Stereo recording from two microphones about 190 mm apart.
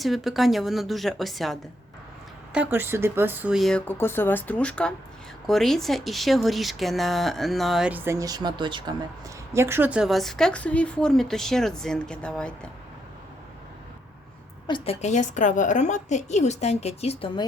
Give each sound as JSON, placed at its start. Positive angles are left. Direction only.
{"t": 0.0, "sound": "speech", "side_deg": 0}
{"t": 14.7, "sound": "a woman's voice", "side_deg": 35}